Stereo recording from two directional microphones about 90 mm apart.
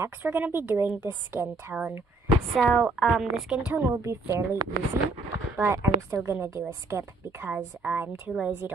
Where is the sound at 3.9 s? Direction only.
30° right (ahead or behind).